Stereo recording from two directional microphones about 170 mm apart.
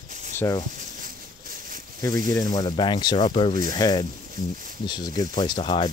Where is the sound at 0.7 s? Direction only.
50° right (ahead or behind).